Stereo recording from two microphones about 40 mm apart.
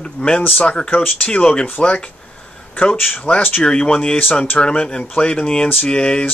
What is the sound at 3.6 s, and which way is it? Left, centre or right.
Speech, left.